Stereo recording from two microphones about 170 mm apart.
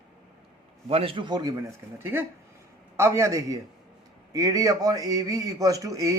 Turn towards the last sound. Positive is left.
turn(degrees=-20)  # may be behind; listen again after turning